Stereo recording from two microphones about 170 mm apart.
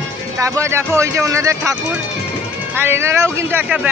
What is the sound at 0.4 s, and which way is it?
A woman's voice, 15° right (ahead or behind).